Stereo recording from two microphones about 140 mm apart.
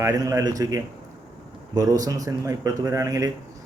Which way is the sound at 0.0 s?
25° right (ahead or behind).